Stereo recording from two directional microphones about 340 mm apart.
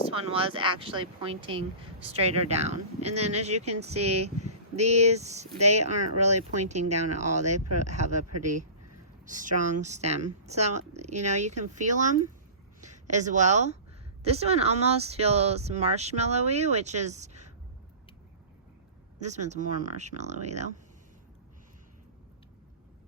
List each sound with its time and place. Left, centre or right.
0.1 s speech: centre
5.5 s speech: right
5.8 s speech: centre
7.5 s speech: right
7.9 s speech: centre
9.2 s speech: right
19.2 s speech: centre